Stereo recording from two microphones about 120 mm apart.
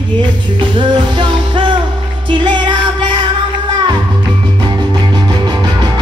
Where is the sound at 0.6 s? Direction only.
40° right (ahead or behind).